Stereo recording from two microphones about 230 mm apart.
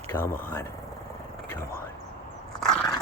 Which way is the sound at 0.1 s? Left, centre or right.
Centre.